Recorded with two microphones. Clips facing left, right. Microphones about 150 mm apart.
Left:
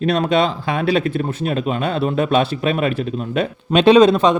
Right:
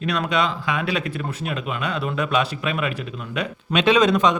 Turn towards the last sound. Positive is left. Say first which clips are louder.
# left 6 dB
turn(degrees=30)  # may be behind; listen again after turning